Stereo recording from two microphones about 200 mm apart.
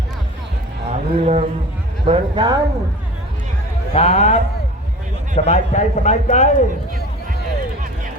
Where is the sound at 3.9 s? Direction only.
30° left (ahead or behind).